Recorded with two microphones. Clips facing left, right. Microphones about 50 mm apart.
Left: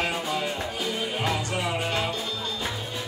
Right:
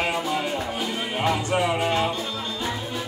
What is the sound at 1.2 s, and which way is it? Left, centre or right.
Music, right.